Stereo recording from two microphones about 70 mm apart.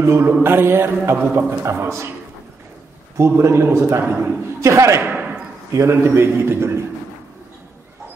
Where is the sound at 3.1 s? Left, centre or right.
Right.